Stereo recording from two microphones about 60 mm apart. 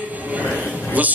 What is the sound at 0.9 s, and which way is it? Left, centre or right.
Speech, right.